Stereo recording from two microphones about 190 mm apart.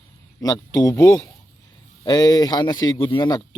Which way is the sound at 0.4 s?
20° left (ahead or behind).